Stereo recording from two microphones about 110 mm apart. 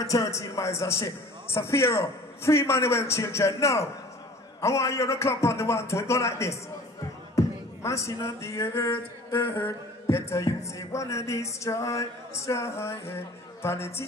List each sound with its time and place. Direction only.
0.0 s speech: 30° left (ahead or behind)